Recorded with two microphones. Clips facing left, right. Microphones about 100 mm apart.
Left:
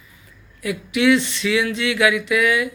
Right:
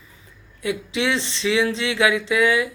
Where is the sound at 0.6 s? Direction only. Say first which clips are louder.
Left 4 dB; 25° right (ahead or behind).